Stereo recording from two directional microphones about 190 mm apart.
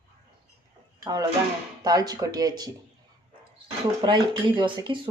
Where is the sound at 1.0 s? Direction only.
20° right (ahead or behind).